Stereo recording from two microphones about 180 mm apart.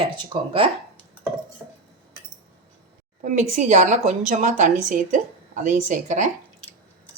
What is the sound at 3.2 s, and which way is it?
A woman's voice, 45° right (ahead or behind).